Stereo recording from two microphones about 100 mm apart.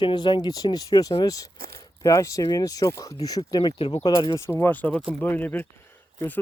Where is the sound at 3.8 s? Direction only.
60° left (ahead or behind).